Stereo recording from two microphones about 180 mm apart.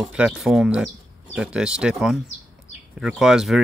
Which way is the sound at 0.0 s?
5° right (ahead or behind).